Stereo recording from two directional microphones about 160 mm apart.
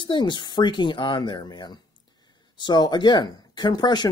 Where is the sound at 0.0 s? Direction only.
30° left (ahead or behind).